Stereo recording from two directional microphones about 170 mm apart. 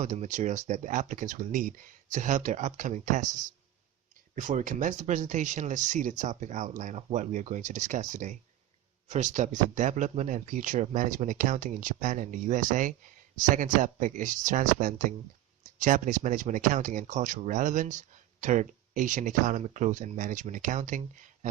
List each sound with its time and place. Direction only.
0.0 s speech: 45° right (ahead or behind)
4.4 s speech: 50° right (ahead or behind)